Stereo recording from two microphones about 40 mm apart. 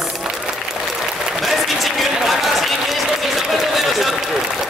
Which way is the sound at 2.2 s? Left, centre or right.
Centre.